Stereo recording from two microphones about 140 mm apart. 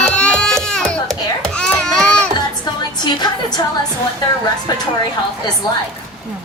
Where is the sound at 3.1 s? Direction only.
30° left (ahead or behind).